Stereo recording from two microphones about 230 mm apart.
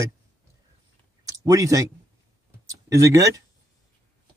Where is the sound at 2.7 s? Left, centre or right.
Centre.